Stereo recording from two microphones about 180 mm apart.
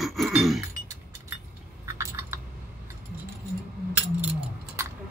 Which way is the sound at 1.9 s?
15° right (ahead or behind).